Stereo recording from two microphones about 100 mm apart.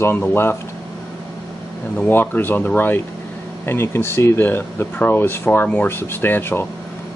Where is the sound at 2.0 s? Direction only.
20° left (ahead or behind).